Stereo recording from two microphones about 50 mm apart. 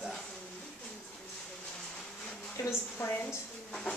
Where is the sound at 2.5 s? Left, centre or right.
Left.